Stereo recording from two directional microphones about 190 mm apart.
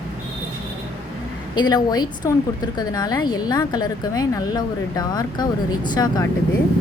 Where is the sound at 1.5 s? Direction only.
20° left (ahead or behind).